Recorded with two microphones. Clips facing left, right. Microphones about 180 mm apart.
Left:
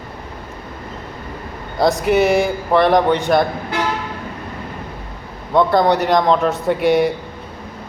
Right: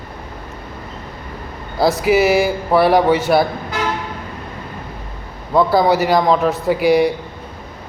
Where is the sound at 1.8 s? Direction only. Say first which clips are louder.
Right 1 dB; centre (ahead or behind).